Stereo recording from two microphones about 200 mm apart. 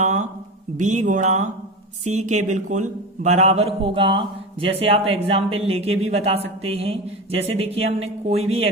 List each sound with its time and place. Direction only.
0.8 s speech: 40° right (ahead or behind)